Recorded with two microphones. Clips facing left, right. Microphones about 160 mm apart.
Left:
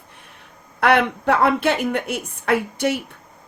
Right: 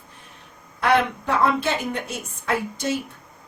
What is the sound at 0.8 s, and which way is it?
Speech, 65° left (ahead or behind).